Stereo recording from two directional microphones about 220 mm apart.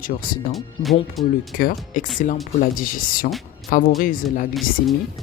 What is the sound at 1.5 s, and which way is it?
Speech, 40° left (ahead or behind).